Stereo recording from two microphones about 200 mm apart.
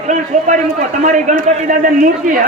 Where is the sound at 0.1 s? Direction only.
40° right (ahead or behind).